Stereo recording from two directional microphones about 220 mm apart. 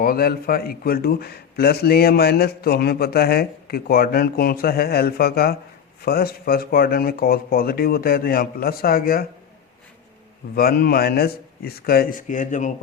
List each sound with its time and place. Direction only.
0.0 s a man's voice: 45° left (ahead or behind)
10.5 s a man's voice: 45° left (ahead or behind)